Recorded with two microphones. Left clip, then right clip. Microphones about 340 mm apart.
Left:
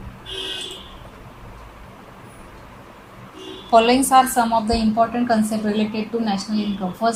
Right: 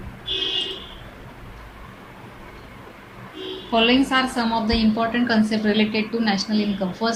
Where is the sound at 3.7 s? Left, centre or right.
Centre.